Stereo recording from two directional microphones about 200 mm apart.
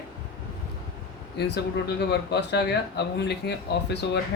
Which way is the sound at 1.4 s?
55° left (ahead or behind).